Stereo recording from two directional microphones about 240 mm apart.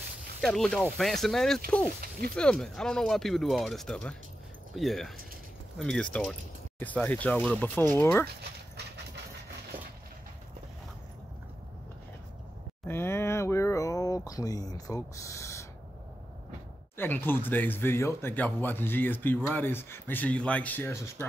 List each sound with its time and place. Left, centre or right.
0.4 s speech: centre
8.4 s vehicle: right
12.8 s a sound: centre
16.9 s speech: centre